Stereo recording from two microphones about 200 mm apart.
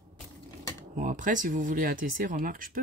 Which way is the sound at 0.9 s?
40° right (ahead or behind).